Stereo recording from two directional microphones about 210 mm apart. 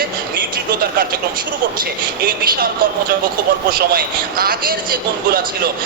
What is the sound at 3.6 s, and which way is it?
Speech, 45° right (ahead or behind).